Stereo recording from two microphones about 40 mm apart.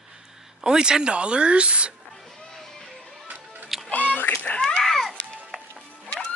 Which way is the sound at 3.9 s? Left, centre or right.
Left.